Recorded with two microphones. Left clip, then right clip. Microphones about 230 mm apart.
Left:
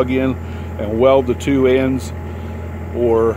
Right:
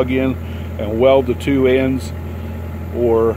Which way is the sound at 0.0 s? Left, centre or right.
Centre.